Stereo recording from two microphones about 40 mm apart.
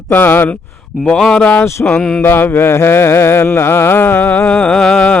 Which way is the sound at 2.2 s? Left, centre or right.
Left.